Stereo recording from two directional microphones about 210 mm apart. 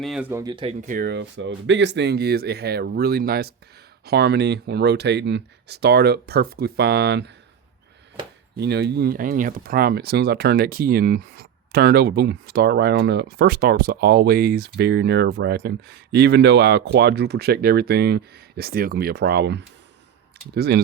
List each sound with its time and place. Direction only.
0.0 s speech: 5° right (ahead or behind); by 7.3 s 50° right (ahead or behind)
8.5 s speech: 55° right (ahead or behind)